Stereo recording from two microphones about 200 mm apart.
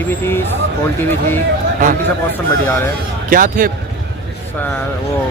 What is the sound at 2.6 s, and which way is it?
Speech, 10° left (ahead or behind).